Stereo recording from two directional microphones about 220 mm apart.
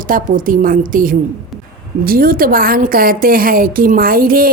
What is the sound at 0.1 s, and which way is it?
Speech, 40° right (ahead or behind).